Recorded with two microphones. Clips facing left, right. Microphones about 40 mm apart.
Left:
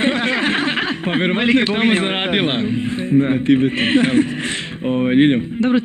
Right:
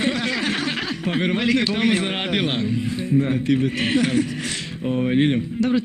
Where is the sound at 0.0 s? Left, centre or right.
Left.